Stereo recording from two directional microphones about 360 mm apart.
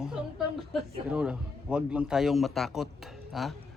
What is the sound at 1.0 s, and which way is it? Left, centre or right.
A man's voice, centre.